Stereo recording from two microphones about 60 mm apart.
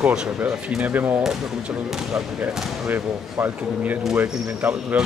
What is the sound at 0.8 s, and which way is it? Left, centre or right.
Speech, right.